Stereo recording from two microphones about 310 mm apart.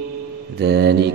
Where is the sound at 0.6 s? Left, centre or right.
Right.